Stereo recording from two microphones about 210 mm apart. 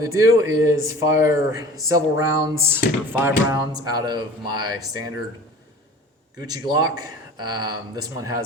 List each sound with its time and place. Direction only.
0.0 s speech: 15° right (ahead or behind)
6.4 s speech: 20° right (ahead or behind)